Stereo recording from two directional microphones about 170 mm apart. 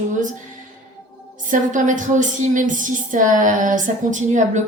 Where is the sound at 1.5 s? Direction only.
50° right (ahead or behind).